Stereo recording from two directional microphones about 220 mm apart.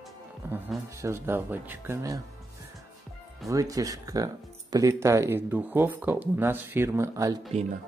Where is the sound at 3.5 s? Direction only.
15° right (ahead or behind).